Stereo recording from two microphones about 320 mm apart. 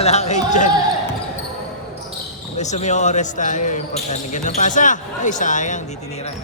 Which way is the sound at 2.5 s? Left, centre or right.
Left.